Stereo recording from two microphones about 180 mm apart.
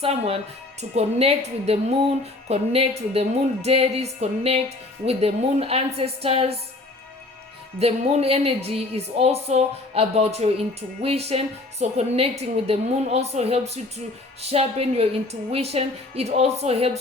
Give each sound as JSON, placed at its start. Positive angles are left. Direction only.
{"t": 0.8, "sound": "a woman's voice", "side_deg": -35}
{"t": 7.8, "sound": "a woman's voice", "side_deg": -35}